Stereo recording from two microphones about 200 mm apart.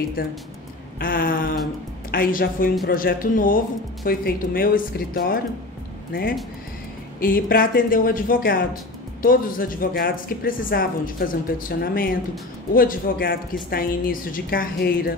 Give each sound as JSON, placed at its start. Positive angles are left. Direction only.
{"t": 0.2, "sound": "speech", "side_deg": 45}